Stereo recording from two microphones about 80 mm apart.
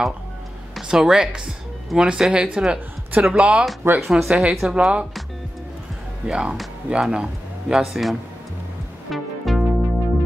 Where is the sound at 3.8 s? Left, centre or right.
Right.